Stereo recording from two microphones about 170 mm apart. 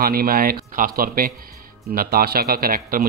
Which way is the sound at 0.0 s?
60° right (ahead or behind).